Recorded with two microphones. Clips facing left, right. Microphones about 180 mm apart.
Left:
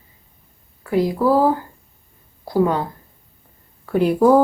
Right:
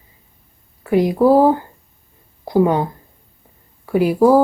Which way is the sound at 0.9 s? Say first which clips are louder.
Right 4 dB; 20° right (ahead or behind).